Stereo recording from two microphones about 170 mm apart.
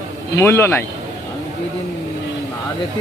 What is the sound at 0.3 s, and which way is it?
Speech, 15° left (ahead or behind).